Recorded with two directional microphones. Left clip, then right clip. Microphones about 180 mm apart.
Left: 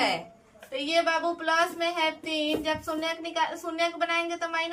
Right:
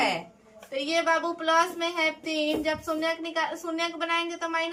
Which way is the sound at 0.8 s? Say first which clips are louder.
Even; 20° right (ahead or behind).